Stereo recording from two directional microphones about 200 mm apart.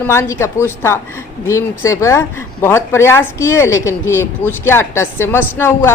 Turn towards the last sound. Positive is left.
turn(degrees=10)  # may be behind; listen again after turning